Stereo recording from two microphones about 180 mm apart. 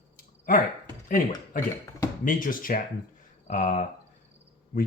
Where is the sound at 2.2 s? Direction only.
50° left (ahead or behind).